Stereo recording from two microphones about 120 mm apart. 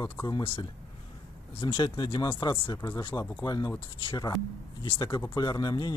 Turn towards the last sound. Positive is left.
turn(degrees=35)  # may be behind; listen again after turning